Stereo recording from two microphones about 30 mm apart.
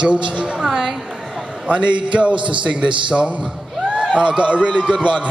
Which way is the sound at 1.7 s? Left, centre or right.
Right.